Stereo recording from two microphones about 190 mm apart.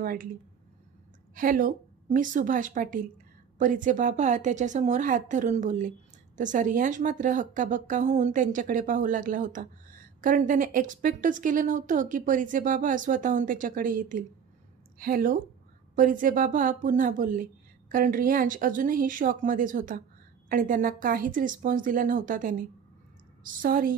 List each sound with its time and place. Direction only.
0.0 s a woman's voice: 50° right (ahead or behind)
1.3 s a woman's voice: 45° right (ahead or behind)